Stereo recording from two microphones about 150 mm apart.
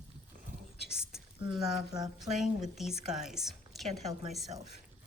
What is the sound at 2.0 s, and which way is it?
Speech, 25° right (ahead or behind).